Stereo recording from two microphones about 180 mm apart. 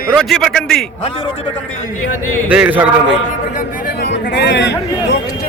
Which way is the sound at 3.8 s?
70° left (ahead or behind).